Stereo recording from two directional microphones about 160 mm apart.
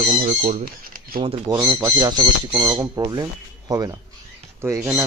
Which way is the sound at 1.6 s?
15° right (ahead or behind).